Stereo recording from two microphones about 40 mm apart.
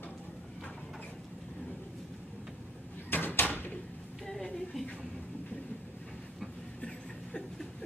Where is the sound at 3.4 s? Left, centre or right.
Left.